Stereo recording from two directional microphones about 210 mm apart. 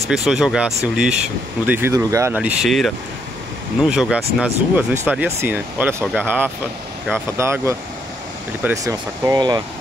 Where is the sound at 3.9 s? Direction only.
5° right (ahead or behind).